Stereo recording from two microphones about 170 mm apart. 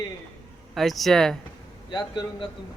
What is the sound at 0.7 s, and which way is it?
Speech, centre (ahead or behind).